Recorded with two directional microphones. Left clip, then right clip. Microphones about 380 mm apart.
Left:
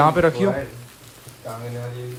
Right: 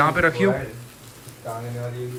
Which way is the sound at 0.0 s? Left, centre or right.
Centre.